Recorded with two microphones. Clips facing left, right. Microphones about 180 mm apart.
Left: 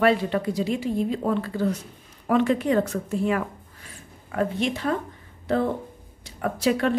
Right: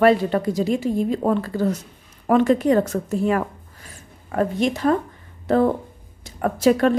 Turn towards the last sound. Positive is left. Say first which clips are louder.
# right 6 dB
turn(degrees=-45)  # may be behind; listen again after turning